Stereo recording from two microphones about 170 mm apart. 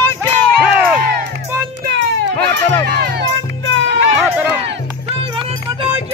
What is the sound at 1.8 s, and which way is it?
Music, 75° right (ahead or behind).